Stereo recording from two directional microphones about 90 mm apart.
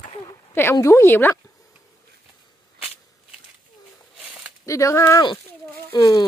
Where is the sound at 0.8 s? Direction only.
30° left (ahead or behind).